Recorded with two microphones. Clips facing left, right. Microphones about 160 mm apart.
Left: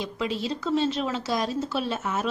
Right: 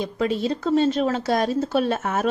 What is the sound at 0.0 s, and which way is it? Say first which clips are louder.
A woman's voice: right 6 dB; 50° right (ahead or behind).